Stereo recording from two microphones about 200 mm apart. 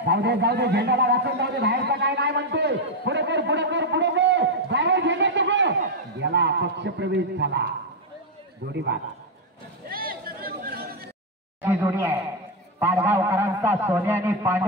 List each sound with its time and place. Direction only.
0.0 s a man's voice: 55° right (ahead or behind)
8.7 s a man's voice: 60° right (ahead or behind)
9.8 s chatter: 50° right (ahead or behind)
11.6 s a man's voice: 10° right (ahead or behind)